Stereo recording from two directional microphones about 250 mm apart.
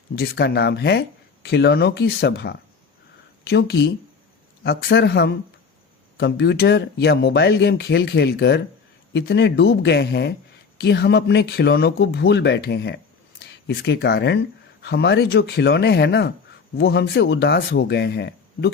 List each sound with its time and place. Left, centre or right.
0.2 s speech: left